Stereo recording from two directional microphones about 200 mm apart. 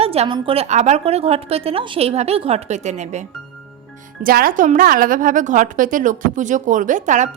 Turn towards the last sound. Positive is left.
turn(degrees=-40)  # may be behind; listen again after turning